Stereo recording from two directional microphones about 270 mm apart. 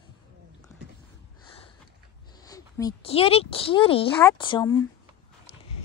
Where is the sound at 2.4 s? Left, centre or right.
Centre.